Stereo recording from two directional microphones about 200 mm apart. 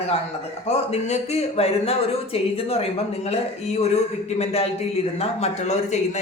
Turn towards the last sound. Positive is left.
turn(degrees=35)  # may be behind; listen again after turning